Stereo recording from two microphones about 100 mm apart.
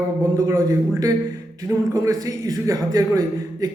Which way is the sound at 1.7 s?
20° right (ahead or behind).